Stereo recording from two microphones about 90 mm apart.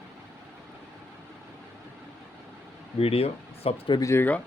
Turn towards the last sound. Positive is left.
turn(degrees=30)  # may be behind; listen again after turning